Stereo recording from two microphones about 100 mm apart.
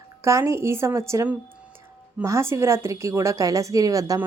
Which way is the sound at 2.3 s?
30° right (ahead or behind).